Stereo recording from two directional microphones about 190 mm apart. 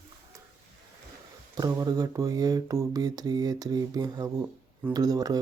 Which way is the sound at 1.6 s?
20° right (ahead or behind).